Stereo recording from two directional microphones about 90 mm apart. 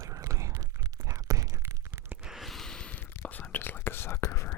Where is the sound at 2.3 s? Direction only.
Centre (ahead or behind).